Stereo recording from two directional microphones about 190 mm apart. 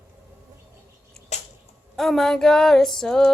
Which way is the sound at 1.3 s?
35° left (ahead or behind).